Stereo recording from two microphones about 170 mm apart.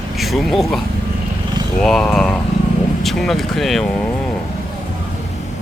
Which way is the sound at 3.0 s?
Centre (ahead or behind).